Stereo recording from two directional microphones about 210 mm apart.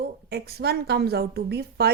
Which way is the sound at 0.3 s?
50° right (ahead or behind).